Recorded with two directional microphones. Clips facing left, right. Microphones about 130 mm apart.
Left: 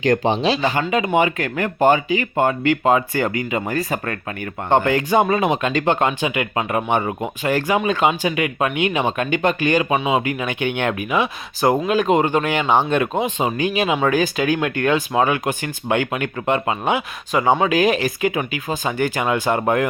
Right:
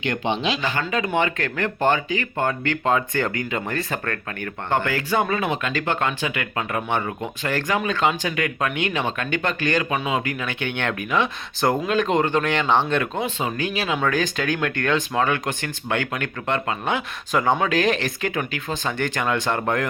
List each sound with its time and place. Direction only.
0.0 s speech: 40° left (ahead or behind); by 19.9 s 10° left (ahead or behind)